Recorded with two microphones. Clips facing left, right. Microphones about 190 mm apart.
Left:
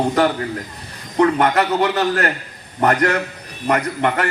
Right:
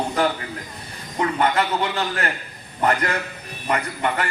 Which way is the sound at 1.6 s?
75° left (ahead or behind).